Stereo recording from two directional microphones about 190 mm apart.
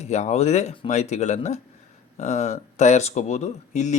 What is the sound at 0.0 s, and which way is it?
Speech, 35° left (ahead or behind).